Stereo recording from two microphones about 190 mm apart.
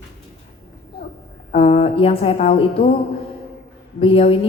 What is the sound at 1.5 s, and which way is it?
Speech, 35° left (ahead or behind).